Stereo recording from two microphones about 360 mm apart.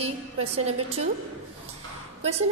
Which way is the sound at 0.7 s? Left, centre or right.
Centre.